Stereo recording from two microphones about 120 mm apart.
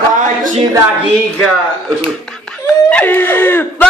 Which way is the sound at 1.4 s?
5° left (ahead or behind).